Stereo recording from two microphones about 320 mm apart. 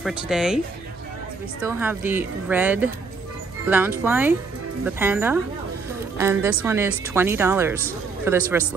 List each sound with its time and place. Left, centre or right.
0.0 s a woman's voice: centre
1.6 s a woman's voice: centre